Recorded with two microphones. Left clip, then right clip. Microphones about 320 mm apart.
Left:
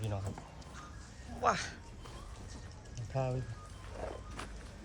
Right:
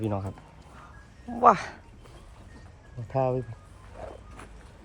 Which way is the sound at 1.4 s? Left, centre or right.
Centre.